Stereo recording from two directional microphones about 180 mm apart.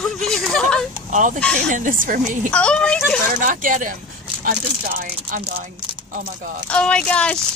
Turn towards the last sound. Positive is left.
turn(degrees=5)  # may be behind; listen again after turning